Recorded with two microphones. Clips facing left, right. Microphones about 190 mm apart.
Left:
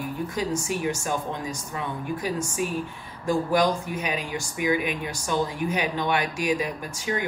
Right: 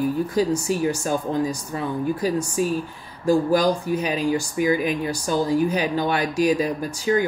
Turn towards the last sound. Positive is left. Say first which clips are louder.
# right 8 dB
turn(degrees=-35)  # may be behind; listen again after turning